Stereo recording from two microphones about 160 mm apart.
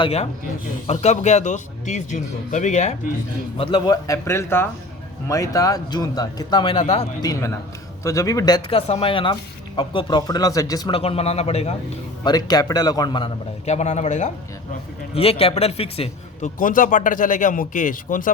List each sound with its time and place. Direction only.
0.0 s speech: 40° left (ahead or behind)
3.6 s speech: 30° left (ahead or behind)
7.2 s a man's voice: 20° left (ahead or behind)
8.7 s speech: 35° left (ahead or behind)
12.2 s speech: 25° left (ahead or behind)
13.7 s speech: 45° left (ahead or behind)
16.6 s speech: 55° left (ahead or behind)